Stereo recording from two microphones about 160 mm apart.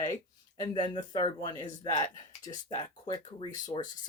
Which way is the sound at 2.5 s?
40° left (ahead or behind).